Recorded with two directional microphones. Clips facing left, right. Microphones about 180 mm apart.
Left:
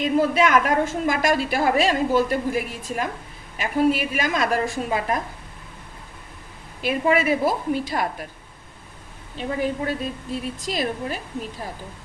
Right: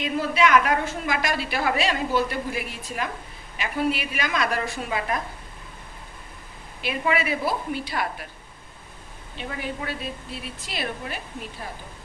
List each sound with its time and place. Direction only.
0.0 s a woman's voice: 50° left (ahead or behind)
6.8 s a woman's voice: 45° left (ahead or behind)
9.4 s a woman's voice: 40° left (ahead or behind)